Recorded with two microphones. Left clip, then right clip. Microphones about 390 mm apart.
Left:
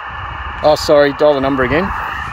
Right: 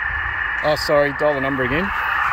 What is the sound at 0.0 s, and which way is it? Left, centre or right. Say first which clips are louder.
Speech: right 3 dB; left.